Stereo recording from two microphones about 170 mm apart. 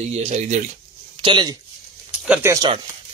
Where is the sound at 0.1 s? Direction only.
40° right (ahead or behind).